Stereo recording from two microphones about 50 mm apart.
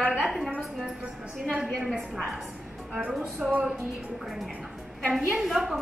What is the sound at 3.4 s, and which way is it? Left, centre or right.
Music, right.